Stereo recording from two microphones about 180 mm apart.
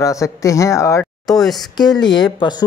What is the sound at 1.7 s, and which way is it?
Speech, 25° left (ahead or behind).